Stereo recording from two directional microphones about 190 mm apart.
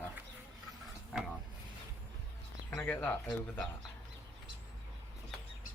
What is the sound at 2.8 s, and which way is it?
Speech, 10° left (ahead or behind).